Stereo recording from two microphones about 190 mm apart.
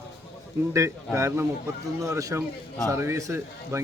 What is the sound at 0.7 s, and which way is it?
Speech, 15° right (ahead or behind).